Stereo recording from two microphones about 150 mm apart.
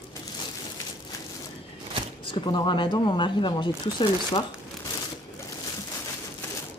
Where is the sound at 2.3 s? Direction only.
30° left (ahead or behind).